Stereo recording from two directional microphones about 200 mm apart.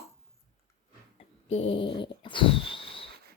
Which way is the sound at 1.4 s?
30° left (ahead or behind).